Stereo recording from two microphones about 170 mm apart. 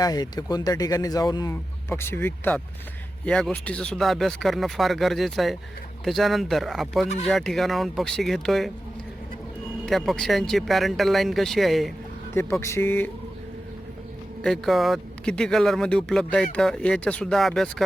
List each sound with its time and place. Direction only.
0.0 s speech: 20° left (ahead or behind); by 8.7 s centre (ahead or behind)
9.8 s speech: centre (ahead or behind)
12.3 s speech: 15° left (ahead or behind)
14.4 s speech: centre (ahead or behind)